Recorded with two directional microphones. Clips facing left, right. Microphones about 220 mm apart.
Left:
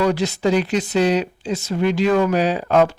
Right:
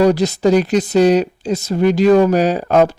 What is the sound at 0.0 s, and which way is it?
A man's voice, 40° right (ahead or behind).